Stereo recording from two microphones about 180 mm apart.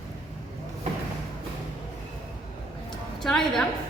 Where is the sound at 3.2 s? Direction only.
Centre (ahead or behind).